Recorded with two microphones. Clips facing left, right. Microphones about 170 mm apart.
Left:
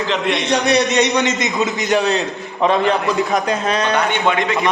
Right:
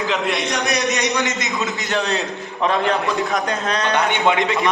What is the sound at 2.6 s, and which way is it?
A man's voice, centre (ahead or behind).